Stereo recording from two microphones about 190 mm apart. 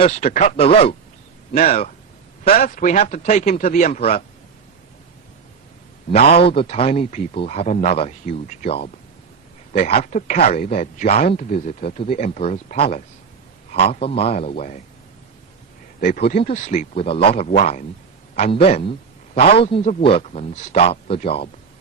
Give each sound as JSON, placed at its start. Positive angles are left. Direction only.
{"t": 0.0, "sound": "speech", "side_deg": 35}
{"t": 6.1, "sound": "speech", "side_deg": 35}
{"t": 16.0, "sound": "a man's voice", "side_deg": 55}